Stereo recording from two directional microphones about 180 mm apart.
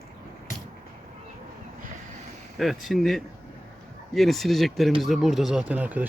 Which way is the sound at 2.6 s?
Centre (ahead or behind).